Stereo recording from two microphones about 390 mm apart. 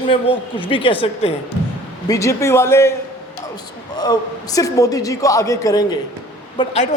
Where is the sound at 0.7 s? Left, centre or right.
Centre.